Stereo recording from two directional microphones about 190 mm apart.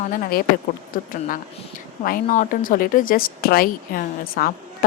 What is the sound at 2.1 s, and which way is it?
A woman's voice, 40° left (ahead or behind).